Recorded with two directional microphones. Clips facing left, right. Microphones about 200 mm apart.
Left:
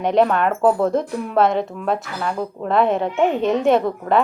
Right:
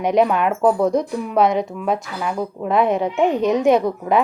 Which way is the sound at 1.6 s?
Centre (ahead or behind).